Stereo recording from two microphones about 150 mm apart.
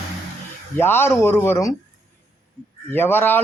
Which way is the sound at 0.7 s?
15° left (ahead or behind).